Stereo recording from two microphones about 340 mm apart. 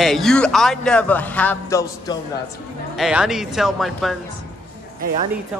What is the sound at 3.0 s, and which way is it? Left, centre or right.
A man's voice, centre.